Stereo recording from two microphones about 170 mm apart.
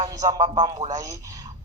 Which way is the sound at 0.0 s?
20° right (ahead or behind).